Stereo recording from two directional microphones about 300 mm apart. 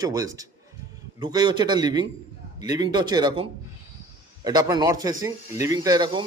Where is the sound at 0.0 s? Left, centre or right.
Centre.